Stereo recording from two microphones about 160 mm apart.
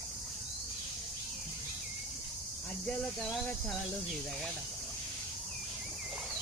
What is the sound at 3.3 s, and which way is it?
Speech, centre (ahead or behind).